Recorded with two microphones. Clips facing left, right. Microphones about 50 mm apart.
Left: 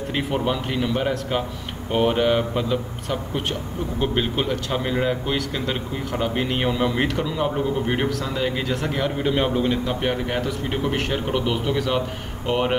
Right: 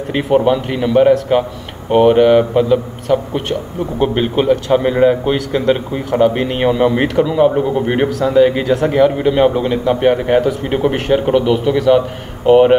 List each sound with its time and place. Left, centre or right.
0.1 s a man's voice: centre
3.1 s a man's voice: centre
4.0 s a man's voice: centre; by 8.7 s right
8.9 s a man's voice: centre
11.3 s a man's voice: centre